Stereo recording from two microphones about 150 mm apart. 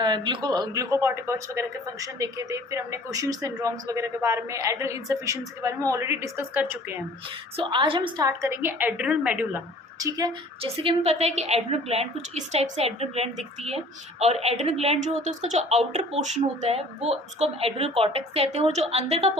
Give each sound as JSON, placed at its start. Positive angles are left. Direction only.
{"t": 0.0, "sound": "speech", "side_deg": -30}
{"t": 7.5, "sound": "a woman's voice", "side_deg": -35}
{"t": 8.3, "sound": "a woman's voice", "side_deg": -20}
{"t": 10.0, "sound": "speech", "side_deg": -25}
{"t": 10.6, "sound": "a woman's voice", "side_deg": -40}